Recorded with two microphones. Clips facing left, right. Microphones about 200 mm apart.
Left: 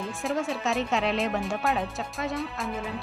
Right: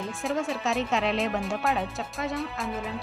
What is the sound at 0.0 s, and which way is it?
Speech, centre (ahead or behind).